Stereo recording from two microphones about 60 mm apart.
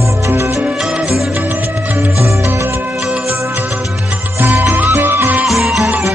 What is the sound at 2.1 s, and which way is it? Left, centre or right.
Music, right.